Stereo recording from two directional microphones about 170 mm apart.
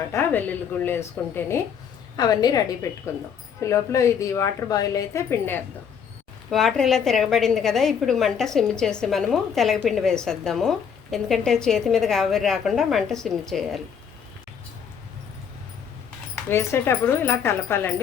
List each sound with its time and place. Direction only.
0.1 s a woman's voice: 10° left (ahead or behind)
6.5 s a woman's voice: centre (ahead or behind)
16.5 s a woman's voice: 15° left (ahead or behind)